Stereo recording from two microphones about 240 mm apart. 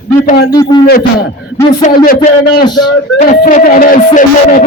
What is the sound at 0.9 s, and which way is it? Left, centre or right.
Speech, left.